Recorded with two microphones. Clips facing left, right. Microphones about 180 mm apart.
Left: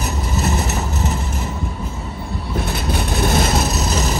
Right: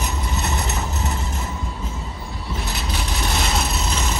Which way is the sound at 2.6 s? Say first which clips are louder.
Left 5 dB; 55° left (ahead or behind).